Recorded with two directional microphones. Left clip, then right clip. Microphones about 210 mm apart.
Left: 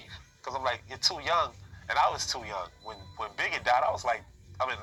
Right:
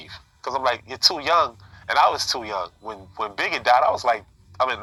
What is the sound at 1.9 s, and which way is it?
Speech, 50° right (ahead or behind).